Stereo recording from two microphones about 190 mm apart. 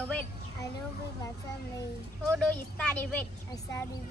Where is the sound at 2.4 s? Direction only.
5° left (ahead or behind).